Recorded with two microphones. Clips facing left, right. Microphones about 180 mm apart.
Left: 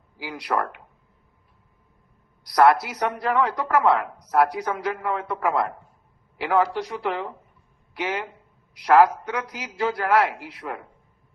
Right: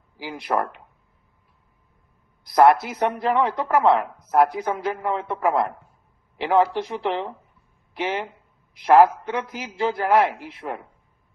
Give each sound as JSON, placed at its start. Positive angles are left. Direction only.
{"t": 0.2, "sound": "speech", "side_deg": -25}
{"t": 2.4, "sound": "speech", "side_deg": -25}